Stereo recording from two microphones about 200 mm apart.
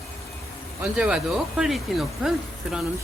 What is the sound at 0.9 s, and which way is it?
Speech, 5° right (ahead or behind).